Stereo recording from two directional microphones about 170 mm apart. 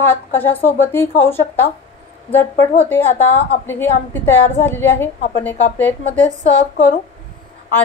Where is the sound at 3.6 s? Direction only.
15° left (ahead or behind).